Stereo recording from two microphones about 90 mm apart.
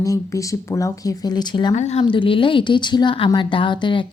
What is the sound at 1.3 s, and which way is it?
Speech, 55° left (ahead or behind).